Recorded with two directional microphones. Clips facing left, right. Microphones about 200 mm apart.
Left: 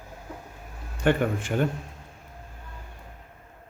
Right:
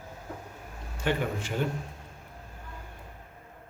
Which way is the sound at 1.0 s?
50° left (ahead or behind).